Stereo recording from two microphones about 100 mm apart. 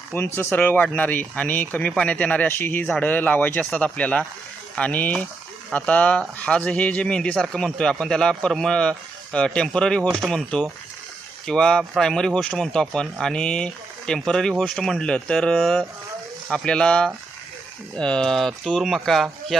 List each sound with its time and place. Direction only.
0.3 s speech: 20° left (ahead or behind); by 19.5 s centre (ahead or behind)